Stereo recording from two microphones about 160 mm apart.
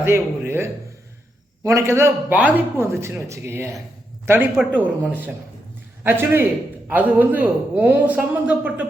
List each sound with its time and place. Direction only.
0.0 s a man's voice: 15° right (ahead or behind)